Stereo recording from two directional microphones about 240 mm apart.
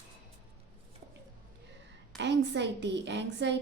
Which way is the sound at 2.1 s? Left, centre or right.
Right.